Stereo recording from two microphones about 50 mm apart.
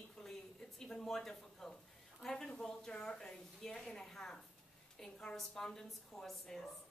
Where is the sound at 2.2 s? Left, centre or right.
Centre.